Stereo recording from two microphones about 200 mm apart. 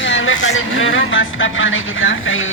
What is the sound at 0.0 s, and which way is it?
Speech, 75° left (ahead or behind).